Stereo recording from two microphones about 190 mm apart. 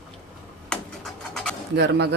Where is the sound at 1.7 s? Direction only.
60° right (ahead or behind).